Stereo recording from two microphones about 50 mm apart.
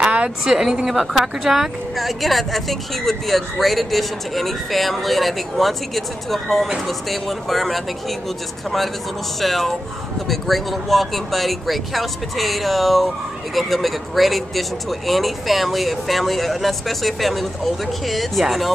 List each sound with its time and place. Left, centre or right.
0.0 s a sound: centre
0.5 s speech: centre
9.4 s speech: centre